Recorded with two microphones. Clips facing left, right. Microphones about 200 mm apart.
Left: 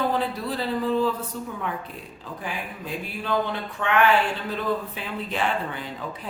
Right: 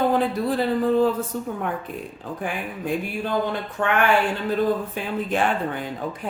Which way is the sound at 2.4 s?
50° right (ahead or behind).